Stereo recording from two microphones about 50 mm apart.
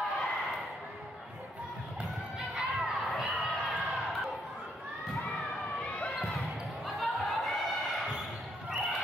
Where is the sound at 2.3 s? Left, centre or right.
Centre.